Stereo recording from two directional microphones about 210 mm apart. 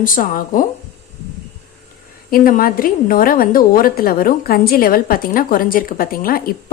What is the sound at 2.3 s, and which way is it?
A woman's voice, 45° left (ahead or behind).